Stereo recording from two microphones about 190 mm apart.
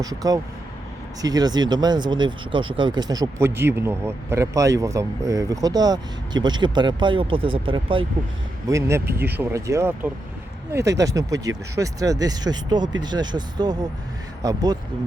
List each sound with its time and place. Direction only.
0.2 s speech: 20° right (ahead or behind)
8.6 s speech: 15° right (ahead or behind)